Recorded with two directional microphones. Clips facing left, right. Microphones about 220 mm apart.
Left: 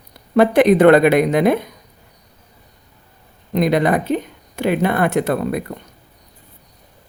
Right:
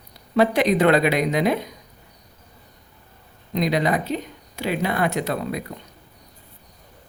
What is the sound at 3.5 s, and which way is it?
Speech, 55° left (ahead or behind).